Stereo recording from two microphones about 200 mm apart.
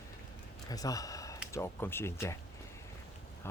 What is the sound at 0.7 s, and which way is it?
Speech, 20° left (ahead or behind).